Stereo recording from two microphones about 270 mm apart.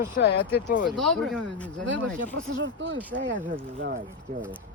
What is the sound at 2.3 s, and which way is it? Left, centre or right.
Speech, right.